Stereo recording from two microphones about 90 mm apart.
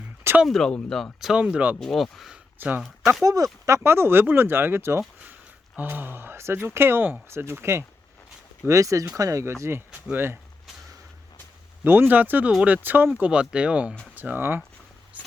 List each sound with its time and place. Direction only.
0.4 s speech: 5° left (ahead or behind)
1.2 s speech: 10° right (ahead or behind)
1.8 s speech: centre (ahead or behind)
2.6 s speech: 20° right (ahead or behind)
3.2 s speech: 40° right (ahead or behind); by 10.3 s 25° right (ahead or behind)
11.8 s speech: 25° right (ahead or behind)
15.1 s walk: 15° right (ahead or behind)